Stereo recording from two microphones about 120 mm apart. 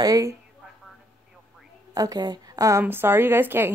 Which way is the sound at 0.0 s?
30° right (ahead or behind).